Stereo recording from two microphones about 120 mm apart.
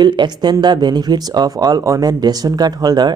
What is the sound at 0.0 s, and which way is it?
Speech, 40° right (ahead or behind).